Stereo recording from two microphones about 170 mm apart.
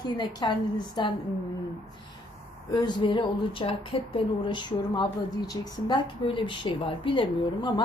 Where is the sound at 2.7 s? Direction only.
25° left (ahead or behind).